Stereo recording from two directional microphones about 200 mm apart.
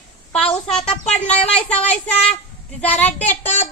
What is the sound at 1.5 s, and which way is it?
Speech, 5° left (ahead or behind).